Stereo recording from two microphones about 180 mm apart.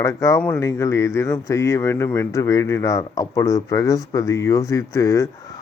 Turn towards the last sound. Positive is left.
turn(degrees=15)  # may be behind; listen again after turning